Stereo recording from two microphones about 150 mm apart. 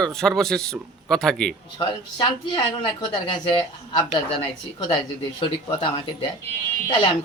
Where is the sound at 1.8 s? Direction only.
30° left (ahead or behind).